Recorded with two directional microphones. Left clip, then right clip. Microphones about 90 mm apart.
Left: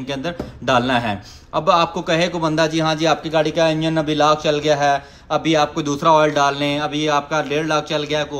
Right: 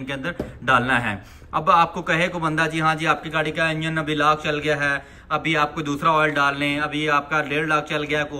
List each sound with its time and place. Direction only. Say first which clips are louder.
0.1 s speech: left 3 dB; 25° left (ahead or behind)
1.6 s a man's voice: left 1 dB; 25° left (ahead or behind); by 6.9 s 40° left (ahead or behind)
7.1 s a man's voice: left 2 dB; 25° left (ahead or behind)